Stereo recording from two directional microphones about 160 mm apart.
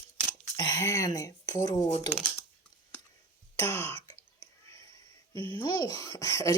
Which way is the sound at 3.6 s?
15° left (ahead or behind).